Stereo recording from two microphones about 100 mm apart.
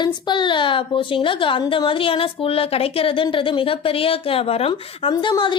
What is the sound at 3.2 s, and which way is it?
Speech, 55° left (ahead or behind).